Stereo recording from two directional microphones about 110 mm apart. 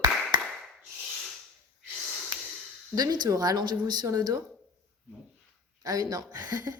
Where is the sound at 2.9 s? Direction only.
35° right (ahead or behind).